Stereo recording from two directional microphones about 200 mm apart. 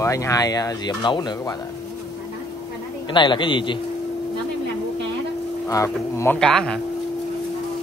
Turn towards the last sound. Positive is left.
turn(degrees=5)  # may be behind; listen again after turning